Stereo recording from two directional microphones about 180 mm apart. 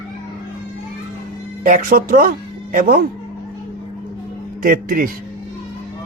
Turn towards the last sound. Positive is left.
turn(degrees=-50)  # may be behind; listen again after turning